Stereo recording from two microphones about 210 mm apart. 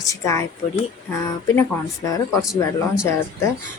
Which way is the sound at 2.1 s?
15° left (ahead or behind).